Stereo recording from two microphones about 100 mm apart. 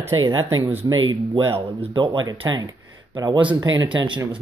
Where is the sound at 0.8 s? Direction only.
35° right (ahead or behind).